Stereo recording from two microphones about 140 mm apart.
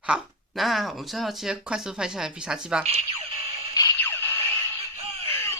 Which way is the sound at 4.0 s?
15° left (ahead or behind).